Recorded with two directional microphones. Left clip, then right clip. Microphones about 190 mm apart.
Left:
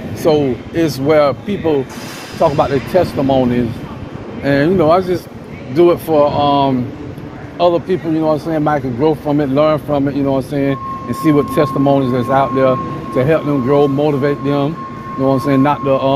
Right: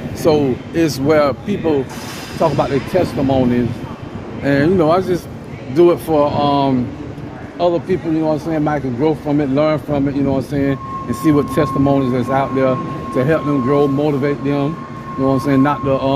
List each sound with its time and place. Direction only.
0.2 s speech: 25° right (ahead or behind)